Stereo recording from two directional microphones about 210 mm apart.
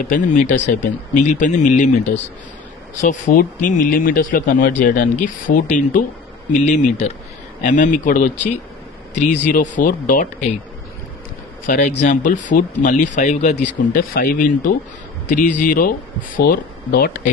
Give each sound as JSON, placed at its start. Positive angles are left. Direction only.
{"t": 0.0, "sound": "speech", "side_deg": 35}
{"t": 11.6, "sound": "speech", "side_deg": 40}